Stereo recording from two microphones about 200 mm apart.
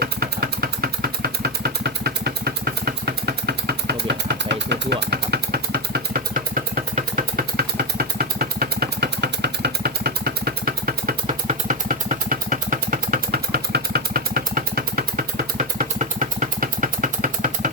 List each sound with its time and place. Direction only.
0.0 s vehicle: 50° right (ahead or behind)